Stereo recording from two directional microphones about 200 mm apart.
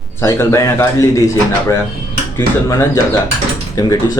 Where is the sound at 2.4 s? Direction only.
15° left (ahead or behind).